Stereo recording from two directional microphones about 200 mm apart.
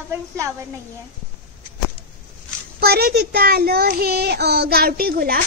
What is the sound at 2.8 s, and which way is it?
Speech, 50° right (ahead or behind).